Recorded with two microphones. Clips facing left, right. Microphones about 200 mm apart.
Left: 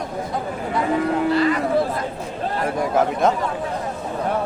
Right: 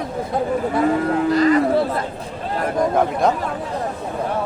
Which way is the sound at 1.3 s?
40° right (ahead or behind).